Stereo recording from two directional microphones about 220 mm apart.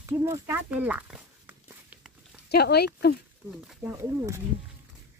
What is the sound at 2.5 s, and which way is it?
Speech, 45° left (ahead or behind).